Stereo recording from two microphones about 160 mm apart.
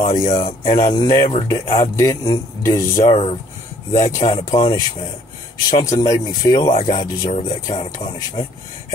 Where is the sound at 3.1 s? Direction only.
40° left (ahead or behind).